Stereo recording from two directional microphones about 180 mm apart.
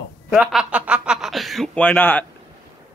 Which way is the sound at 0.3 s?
Centre (ahead or behind).